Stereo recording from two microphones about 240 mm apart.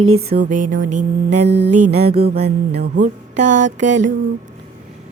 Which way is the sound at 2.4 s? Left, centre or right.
Right.